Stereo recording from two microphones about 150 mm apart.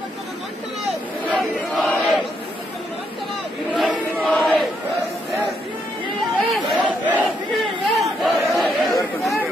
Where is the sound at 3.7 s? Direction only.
5° left (ahead or behind).